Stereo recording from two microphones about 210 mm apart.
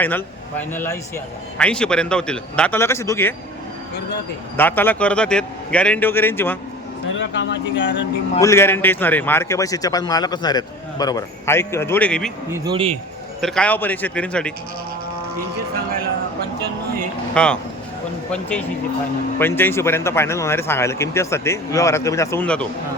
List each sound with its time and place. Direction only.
0.0 s a man's voice: 10° left (ahead or behind)
4.5 s a man's voice: 10° left (ahead or behind)
7.2 s speech: 60° left (ahead or behind)
8.4 s a man's voice: 15° left (ahead or behind)
12.5 s speech: 10° right (ahead or behind)
12.7 s speech: 25° right (ahead or behind)
13.4 s a man's voice: 5° left (ahead or behind)
17.3 s a man's voice: 5° left (ahead or behind)